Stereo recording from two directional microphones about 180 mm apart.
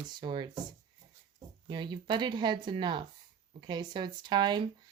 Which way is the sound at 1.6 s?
25° right (ahead or behind).